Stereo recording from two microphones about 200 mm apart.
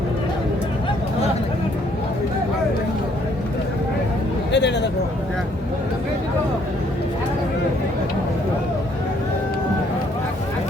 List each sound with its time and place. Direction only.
4.5 s speech: 60° left (ahead or behind)